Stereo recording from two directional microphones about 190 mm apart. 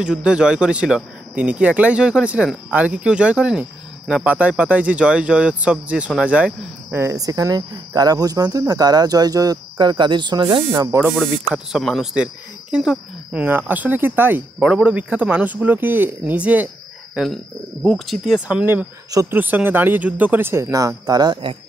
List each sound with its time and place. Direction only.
0.0 s speech: 5° right (ahead or behind); by 11.0 s 20° right (ahead or behind)
11.1 s speech: centre (ahead or behind); by 21.5 s 25° right (ahead or behind)